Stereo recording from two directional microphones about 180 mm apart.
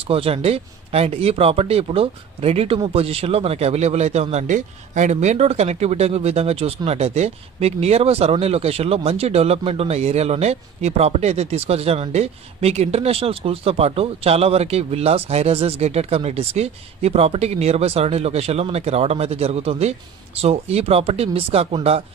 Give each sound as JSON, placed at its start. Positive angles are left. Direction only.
{"t": 0.0, "sound": "speech", "side_deg": -30}